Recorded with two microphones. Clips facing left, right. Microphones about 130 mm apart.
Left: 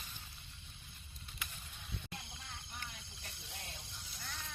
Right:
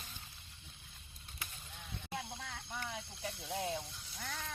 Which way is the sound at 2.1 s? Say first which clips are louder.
Right 8 dB; 80° right.